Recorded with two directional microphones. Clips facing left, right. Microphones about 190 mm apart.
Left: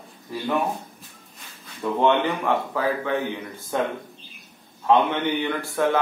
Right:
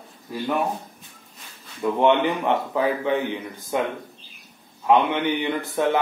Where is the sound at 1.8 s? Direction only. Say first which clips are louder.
Right 2 dB; 15° right (ahead or behind).